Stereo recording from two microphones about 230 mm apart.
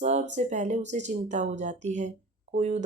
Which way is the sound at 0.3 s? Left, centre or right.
Right.